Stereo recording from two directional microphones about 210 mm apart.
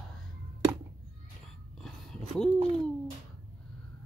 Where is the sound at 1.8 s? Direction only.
Centre (ahead or behind).